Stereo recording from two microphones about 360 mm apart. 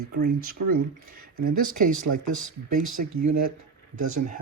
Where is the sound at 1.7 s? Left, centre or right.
Right.